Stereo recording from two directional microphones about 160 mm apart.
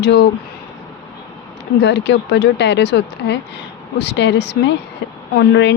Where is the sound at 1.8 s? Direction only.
90° left.